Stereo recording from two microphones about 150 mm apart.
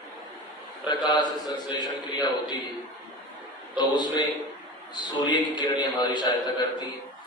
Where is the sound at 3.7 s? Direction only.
30° left (ahead or behind).